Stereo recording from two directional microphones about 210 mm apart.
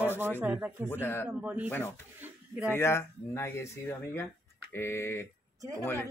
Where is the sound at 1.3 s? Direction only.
5° right (ahead or behind).